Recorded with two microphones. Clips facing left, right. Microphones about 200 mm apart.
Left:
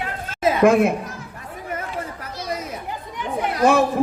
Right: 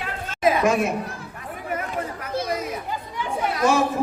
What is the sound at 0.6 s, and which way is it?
Speech, 55° left (ahead or behind).